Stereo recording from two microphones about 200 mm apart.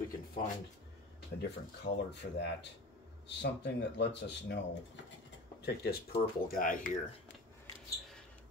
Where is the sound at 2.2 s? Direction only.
60° left (ahead or behind).